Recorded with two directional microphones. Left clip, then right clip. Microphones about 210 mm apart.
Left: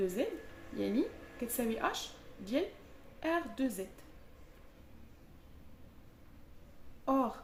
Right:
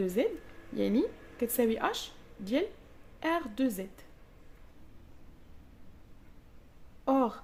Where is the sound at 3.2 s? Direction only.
55° right (ahead or behind).